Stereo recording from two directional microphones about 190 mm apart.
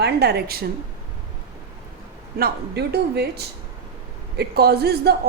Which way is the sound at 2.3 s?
55° right (ahead or behind).